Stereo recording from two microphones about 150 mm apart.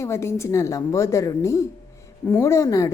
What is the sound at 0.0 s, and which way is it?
A woman's voice, 20° left (ahead or behind).